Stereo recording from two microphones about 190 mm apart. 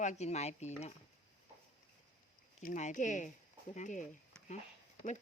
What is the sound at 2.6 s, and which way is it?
Speech, 45° left (ahead or behind).